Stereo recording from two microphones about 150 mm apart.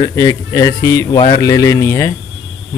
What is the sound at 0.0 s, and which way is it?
Speech, 20° left (ahead or behind).